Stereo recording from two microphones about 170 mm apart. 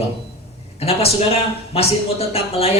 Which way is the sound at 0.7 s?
35° left (ahead or behind).